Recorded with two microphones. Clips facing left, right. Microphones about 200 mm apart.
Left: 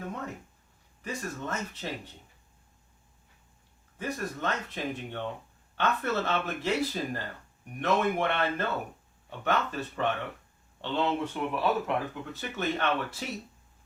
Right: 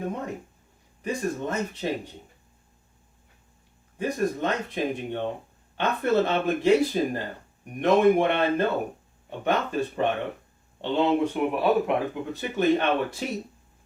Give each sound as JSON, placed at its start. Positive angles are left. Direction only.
{"t": 0.0, "sound": "speech", "side_deg": -20}
{"t": 3.9, "sound": "speech", "side_deg": -15}